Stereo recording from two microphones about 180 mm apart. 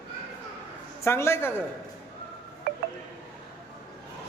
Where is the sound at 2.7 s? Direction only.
60° right (ahead or behind).